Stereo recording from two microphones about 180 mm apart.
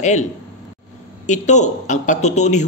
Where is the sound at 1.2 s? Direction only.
40° left (ahead or behind).